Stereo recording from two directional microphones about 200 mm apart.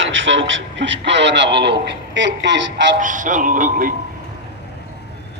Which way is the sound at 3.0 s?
40° right (ahead or behind).